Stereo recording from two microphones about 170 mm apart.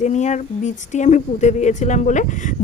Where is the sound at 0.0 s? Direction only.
45° left (ahead or behind).